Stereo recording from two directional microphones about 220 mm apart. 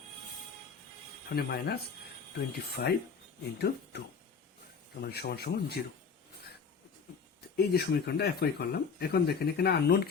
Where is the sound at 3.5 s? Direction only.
50° left (ahead or behind).